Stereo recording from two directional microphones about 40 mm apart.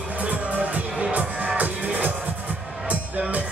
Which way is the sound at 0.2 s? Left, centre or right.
Right.